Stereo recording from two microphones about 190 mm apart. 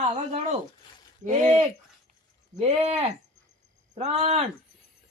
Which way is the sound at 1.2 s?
35° right (ahead or behind).